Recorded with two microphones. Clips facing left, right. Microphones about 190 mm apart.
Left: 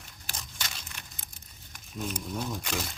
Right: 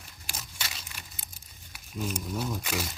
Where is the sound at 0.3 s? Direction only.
5° right (ahead or behind).